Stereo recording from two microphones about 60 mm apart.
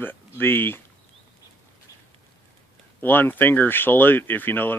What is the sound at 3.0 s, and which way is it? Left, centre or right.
Speech, left.